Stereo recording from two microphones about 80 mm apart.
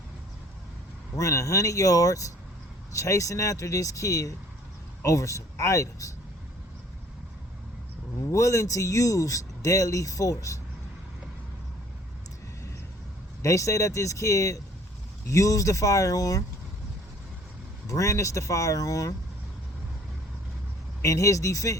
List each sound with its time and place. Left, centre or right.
1.1 s a man's voice: left
8.3 s speech: left
13.4 s speech: left
17.8 s speech: left
21.0 s speech: left